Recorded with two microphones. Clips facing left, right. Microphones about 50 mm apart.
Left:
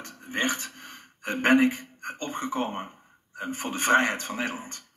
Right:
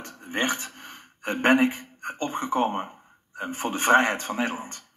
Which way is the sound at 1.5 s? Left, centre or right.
Centre.